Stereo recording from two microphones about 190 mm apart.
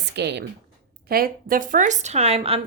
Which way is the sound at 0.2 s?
65° right (ahead or behind).